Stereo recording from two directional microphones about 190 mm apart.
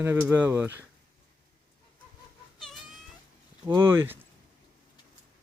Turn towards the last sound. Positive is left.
turn(degrees=-10)  # may be behind; listen again after turning